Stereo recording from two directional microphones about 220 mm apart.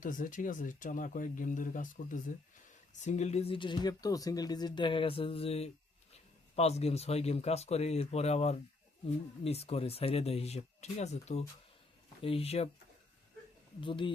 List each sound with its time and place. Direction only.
0.0 s speech: 35° left (ahead or behind)
13.8 s speech: 20° left (ahead or behind)